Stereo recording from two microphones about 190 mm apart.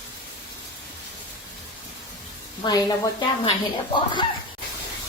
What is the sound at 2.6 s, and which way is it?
Speech, 20° left (ahead or behind).